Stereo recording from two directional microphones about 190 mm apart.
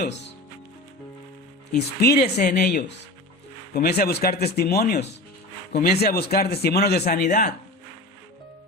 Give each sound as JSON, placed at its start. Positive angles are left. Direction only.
{"t": 2.0, "sound": "speech", "side_deg": 55}
{"t": 2.6, "sound": "speech", "side_deg": 40}
{"t": 3.8, "sound": "speech", "side_deg": 55}
{"t": 7.3, "sound": "speech", "side_deg": 40}